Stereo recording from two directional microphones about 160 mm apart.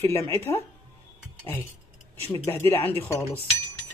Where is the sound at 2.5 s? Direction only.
15° left (ahead or behind).